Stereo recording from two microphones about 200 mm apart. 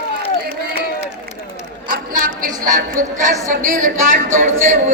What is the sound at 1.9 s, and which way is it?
A woman's voice, 45° right (ahead or behind).